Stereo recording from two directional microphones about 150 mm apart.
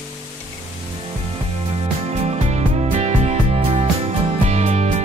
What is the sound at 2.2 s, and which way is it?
Music, 45° right (ahead or behind).